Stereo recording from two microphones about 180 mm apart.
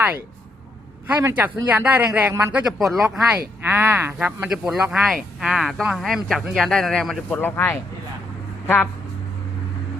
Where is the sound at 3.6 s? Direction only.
10° right (ahead or behind); by 8.9 s 10° left (ahead or behind).